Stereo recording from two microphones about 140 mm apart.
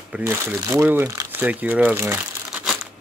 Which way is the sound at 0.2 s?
20° right (ahead or behind).